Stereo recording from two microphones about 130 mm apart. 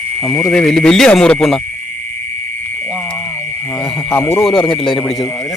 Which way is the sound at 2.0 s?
85° right.